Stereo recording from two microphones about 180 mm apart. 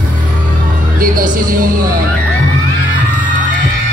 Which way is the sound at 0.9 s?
50° right (ahead or behind).